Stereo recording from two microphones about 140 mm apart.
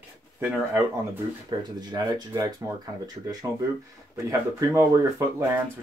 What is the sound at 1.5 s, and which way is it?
Speech, 30° right (ahead or behind).